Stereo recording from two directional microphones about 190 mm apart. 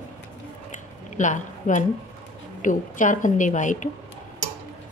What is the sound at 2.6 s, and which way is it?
A woman's voice, 40° left (ahead or behind).